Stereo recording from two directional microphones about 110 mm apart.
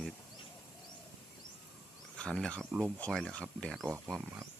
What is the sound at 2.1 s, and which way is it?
Speech, 10° left (ahead or behind).